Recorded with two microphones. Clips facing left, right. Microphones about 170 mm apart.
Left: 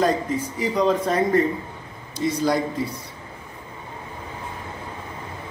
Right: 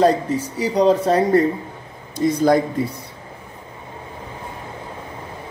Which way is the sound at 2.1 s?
50° right (ahead or behind).